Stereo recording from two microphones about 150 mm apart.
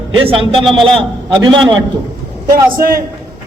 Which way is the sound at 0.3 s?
40° right (ahead or behind).